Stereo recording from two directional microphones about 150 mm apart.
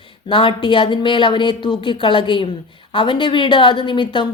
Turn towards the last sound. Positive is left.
turn(degrees=35)  # may be behind; listen again after turning